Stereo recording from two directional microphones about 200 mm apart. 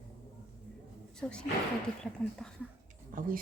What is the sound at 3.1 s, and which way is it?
Speech, 45° right (ahead or behind).